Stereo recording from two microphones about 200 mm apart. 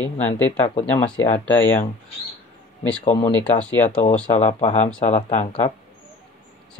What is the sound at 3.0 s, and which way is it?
Speech, 35° left (ahead or behind).